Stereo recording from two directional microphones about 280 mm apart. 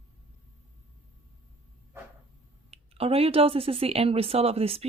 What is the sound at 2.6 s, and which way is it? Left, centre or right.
Speech, right.